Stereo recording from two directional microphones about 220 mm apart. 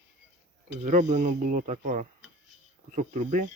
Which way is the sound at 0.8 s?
35° right (ahead or behind).